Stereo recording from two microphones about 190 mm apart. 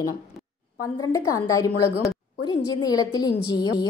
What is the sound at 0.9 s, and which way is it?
A woman's voice, 15° left (ahead or behind).